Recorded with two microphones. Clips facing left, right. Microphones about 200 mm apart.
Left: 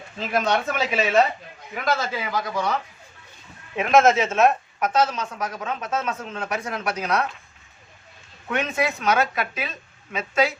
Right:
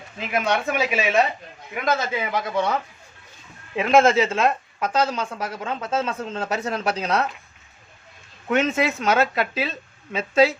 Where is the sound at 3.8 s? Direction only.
30° right (ahead or behind).